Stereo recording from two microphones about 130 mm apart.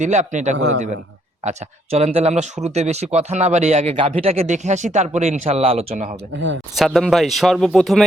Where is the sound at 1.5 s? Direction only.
55° right (ahead or behind).